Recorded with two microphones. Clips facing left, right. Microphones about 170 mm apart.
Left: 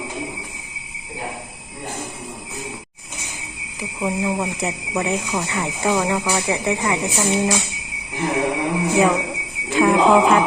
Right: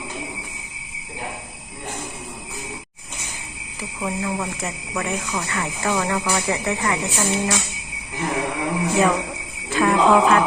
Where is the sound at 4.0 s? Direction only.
15° left (ahead or behind).